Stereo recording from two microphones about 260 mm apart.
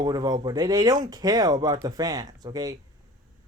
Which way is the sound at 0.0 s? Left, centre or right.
Centre.